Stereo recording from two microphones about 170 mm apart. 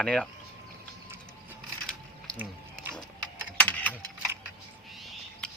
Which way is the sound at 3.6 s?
10° left (ahead or behind).